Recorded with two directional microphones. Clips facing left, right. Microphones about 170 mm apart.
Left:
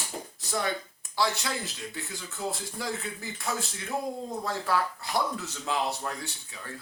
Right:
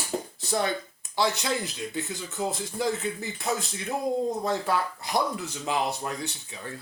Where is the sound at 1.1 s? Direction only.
20° right (ahead or behind).